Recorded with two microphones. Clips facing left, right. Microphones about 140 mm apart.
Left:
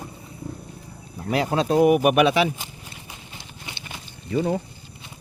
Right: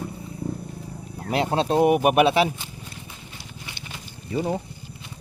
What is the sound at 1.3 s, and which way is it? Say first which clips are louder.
Speech: left 1 dB; 30° right (ahead or behind).